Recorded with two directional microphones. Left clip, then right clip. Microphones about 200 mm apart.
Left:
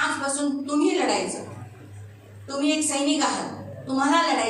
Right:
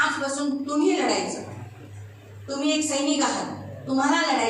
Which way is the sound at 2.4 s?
40° left (ahead or behind).